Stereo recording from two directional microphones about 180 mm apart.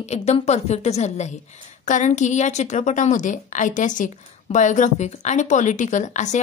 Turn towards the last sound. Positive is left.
turn(degrees=40)  # may be behind; listen again after turning